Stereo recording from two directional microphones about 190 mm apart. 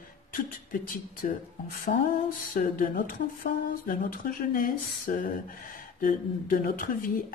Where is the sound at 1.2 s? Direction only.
45° left (ahead or behind).